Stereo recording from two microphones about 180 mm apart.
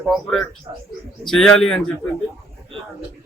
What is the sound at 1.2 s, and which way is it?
Speech, 5° left (ahead or behind).